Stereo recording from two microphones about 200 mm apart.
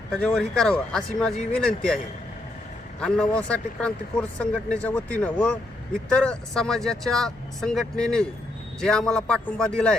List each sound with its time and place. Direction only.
0.3 s speech: centre (ahead or behind)
3.0 s speech: 5° left (ahead or behind)